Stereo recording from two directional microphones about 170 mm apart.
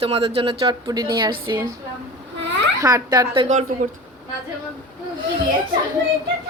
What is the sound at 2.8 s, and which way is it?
Speech, 20° right (ahead or behind).